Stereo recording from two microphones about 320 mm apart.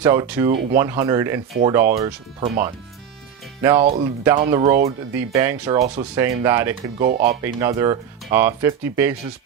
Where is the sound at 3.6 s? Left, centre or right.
Centre.